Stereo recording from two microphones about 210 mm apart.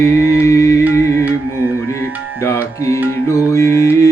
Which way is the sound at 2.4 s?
10° left (ahead or behind).